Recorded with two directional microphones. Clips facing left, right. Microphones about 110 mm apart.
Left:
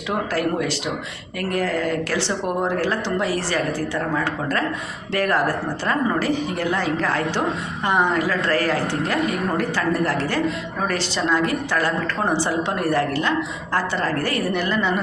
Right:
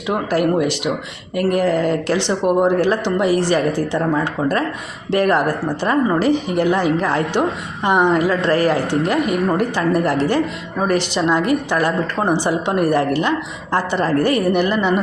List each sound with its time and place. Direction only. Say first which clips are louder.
0.3 s a woman's voice: right 8 dB; 15° right (ahead or behind)